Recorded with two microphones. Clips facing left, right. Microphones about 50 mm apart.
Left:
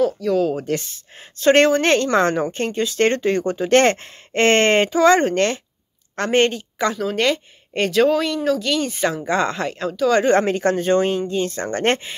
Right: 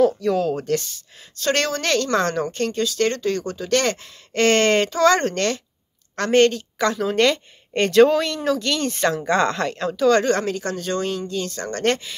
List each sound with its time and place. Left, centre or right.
0.0 s speech: centre
0.7 s a woman's voice: left
4.9 s a woman's voice: centre
10.1 s a woman's voice: left